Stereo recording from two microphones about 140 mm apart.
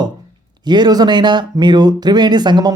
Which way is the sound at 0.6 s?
30° right (ahead or behind).